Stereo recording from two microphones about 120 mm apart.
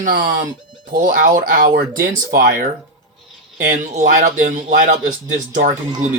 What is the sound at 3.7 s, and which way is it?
Speech, 90° right.